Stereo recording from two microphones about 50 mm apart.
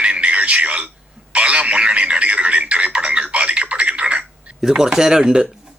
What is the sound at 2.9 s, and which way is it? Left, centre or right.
Telephone, right.